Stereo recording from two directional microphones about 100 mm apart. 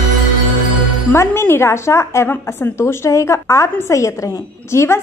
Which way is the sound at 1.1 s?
25° left (ahead or behind).